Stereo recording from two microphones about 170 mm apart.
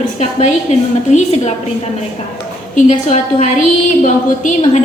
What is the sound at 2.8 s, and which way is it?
A woman's voice, 45° left (ahead or behind).